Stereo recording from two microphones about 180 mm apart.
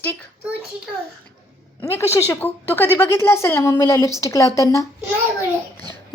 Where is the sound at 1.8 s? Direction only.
15° left (ahead or behind).